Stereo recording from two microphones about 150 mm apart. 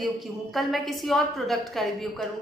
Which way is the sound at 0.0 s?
Centre (ahead or behind).